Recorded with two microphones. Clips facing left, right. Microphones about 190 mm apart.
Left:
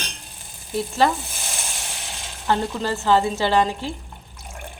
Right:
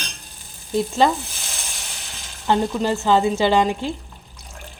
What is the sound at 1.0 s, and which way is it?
Speech, 20° right (ahead or behind).